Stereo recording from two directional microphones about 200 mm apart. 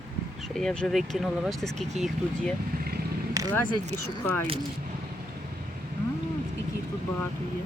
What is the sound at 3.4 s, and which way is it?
Vehicle, 15° right (ahead or behind).